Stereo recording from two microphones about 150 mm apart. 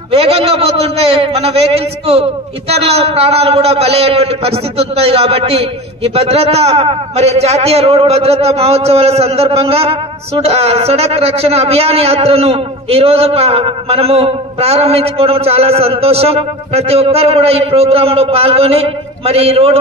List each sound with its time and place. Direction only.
0.1 s a man's voice: 40° right (ahead or behind)